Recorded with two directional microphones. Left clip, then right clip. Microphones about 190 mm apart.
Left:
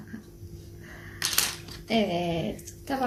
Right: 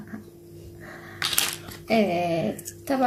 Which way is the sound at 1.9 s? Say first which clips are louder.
Right 4 dB; 45° right (ahead or behind).